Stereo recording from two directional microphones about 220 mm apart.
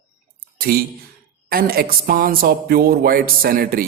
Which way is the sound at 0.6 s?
40° right (ahead or behind).